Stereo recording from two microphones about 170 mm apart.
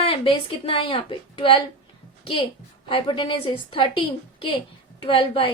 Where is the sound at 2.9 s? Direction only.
30° left (ahead or behind).